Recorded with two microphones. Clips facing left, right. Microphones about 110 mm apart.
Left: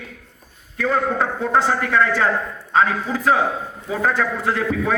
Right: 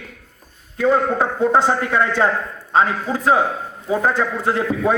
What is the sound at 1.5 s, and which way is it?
A man's voice, 25° right (ahead or behind).